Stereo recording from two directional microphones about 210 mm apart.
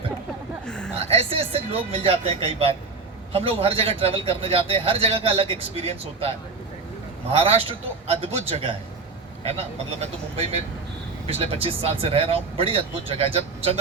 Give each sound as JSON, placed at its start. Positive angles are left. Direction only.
{"t": 0.9, "sound": "a man's voice", "side_deg": -30}
{"t": 7.3, "sound": "a man's voice", "side_deg": -25}